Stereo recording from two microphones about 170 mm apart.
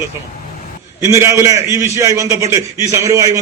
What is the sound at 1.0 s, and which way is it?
A man's voice, 15° right (ahead or behind).